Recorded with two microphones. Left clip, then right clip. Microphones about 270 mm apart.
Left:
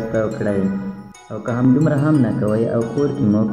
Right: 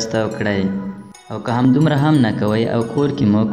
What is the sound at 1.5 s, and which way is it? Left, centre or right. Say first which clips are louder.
Speech: right 1 dB; right.